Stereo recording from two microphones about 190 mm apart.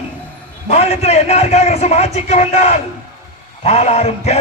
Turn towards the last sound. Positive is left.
turn(degrees=35)  # may be behind; listen again after turning